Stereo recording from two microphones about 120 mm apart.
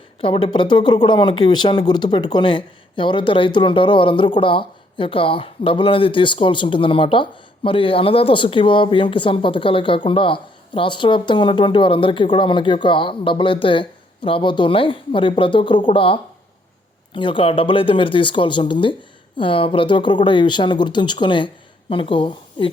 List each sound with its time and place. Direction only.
0.2 s speech: 45° left (ahead or behind)